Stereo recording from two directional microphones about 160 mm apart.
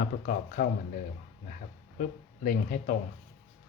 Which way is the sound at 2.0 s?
65° left (ahead or behind).